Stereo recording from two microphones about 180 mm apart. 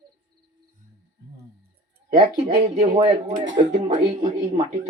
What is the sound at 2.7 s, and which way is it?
Speech, 35° right (ahead or behind).